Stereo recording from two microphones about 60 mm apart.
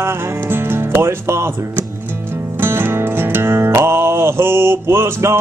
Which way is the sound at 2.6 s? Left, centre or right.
Right.